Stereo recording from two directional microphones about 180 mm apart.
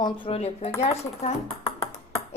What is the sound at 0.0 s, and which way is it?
Speech, 35° left (ahead or behind).